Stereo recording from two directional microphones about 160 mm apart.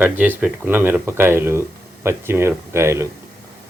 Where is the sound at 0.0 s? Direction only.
10° right (ahead or behind).